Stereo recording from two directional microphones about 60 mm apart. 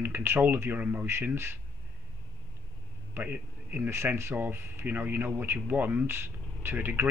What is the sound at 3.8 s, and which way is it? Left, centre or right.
Speech, right.